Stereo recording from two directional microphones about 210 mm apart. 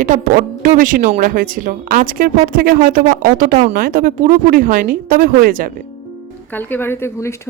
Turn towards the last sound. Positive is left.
turn(degrees=10)  # may be behind; listen again after turning